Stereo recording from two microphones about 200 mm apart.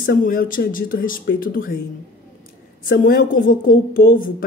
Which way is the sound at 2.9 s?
45° left (ahead or behind).